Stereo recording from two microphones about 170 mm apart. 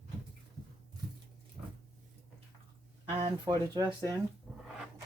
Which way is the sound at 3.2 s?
25° right (ahead or behind).